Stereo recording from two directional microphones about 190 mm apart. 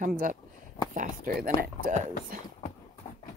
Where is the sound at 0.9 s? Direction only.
45° right (ahead or behind).